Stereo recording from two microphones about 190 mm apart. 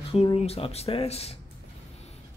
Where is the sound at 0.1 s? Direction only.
30° left (ahead or behind).